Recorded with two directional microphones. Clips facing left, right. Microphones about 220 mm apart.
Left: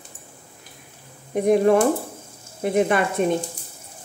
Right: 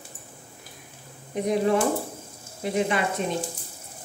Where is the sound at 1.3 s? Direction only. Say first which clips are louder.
Left 6 dB; 55° left (ahead or behind).